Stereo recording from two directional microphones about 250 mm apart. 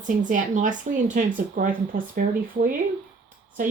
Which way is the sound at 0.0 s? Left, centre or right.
Right.